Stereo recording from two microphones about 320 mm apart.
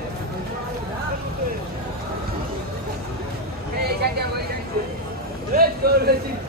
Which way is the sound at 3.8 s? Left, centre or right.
Right.